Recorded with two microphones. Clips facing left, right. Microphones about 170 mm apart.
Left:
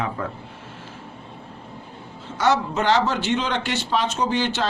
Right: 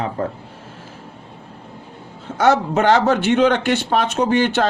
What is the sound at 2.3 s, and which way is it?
Speech, 55° right (ahead or behind).